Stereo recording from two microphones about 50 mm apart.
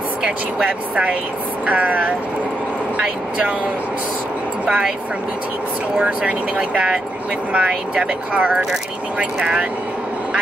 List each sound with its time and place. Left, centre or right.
0.2 s speech: right
5.9 s speech: right